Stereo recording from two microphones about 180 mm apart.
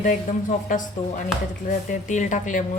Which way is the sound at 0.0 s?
45° left (ahead or behind).